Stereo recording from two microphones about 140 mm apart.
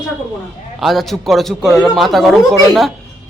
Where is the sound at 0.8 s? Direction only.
Centre (ahead or behind).